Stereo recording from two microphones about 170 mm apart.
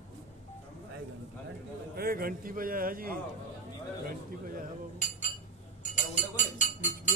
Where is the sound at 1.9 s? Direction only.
60° right (ahead or behind).